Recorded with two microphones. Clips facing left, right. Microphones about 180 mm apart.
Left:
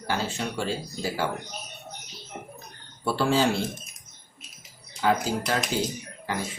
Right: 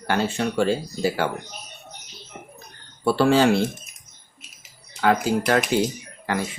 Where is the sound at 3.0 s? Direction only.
65° right (ahead or behind).